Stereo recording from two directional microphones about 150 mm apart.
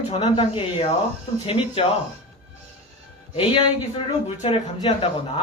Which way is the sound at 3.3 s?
35° left (ahead or behind).